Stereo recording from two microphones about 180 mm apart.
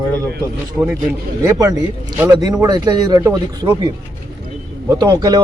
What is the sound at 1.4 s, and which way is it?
A man's voice, 20° right (ahead or behind).